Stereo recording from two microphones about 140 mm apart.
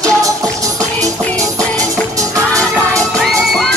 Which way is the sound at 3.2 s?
Centre (ahead or behind).